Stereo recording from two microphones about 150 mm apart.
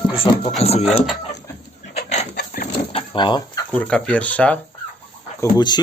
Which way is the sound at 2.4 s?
90° left.